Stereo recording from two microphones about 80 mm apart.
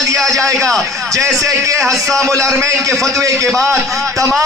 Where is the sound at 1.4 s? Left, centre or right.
Right.